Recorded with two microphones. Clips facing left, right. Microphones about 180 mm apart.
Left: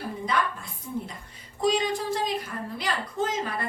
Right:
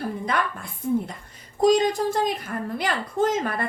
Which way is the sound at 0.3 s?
55° right (ahead or behind).